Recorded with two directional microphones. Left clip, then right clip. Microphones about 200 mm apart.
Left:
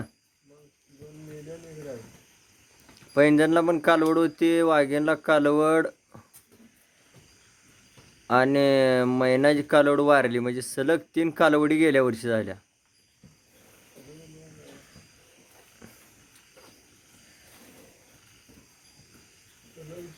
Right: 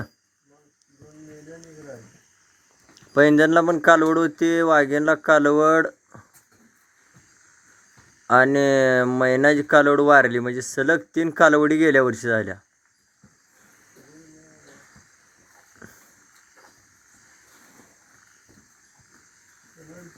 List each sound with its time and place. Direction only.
3.2 s speech: 20° right (ahead or behind)
8.3 s speech: 15° right (ahead or behind)